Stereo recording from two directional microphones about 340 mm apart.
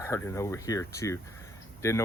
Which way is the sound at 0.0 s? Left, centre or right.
Centre.